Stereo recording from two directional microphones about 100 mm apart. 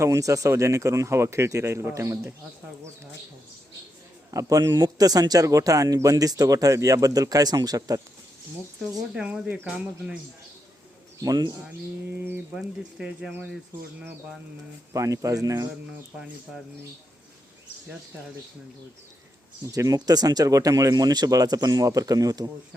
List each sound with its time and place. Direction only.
0.0 s speech: 30° right (ahead or behind)
4.3 s speech: 35° right (ahead or behind)
9.1 s speech: 10° right (ahead or behind)
11.2 s speech: 40° right (ahead or behind)
12.5 s speech: 5° right (ahead or behind)
14.9 s speech: 35° right (ahead or behind)
19.6 s speech: 35° right (ahead or behind)